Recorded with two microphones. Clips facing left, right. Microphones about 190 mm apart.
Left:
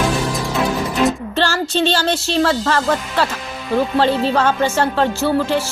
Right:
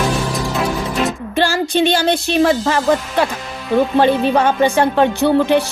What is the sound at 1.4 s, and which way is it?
A woman's voice, 15° right (ahead or behind).